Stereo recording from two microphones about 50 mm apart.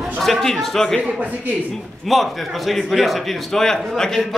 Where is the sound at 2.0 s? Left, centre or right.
Centre.